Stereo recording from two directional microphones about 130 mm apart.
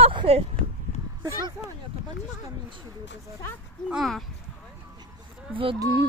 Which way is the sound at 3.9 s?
Centre (ahead or behind).